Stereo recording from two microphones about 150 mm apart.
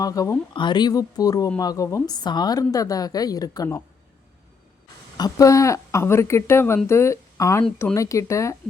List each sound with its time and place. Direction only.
0.0 s a woman's voice: 20° left (ahead or behind)
5.1 s a woman's voice: 25° left (ahead or behind)